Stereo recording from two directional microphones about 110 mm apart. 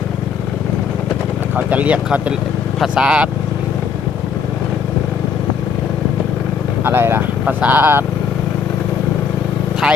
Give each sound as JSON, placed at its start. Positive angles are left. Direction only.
{"t": 1.5, "sound": "speech", "side_deg": -15}
{"t": 6.8, "sound": "speech", "side_deg": -20}